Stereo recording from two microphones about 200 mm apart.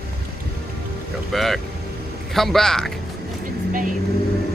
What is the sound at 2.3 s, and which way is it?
Speech, centre (ahead or behind).